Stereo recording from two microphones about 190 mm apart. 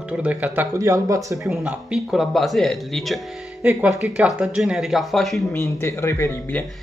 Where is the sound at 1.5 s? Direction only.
5° right (ahead or behind).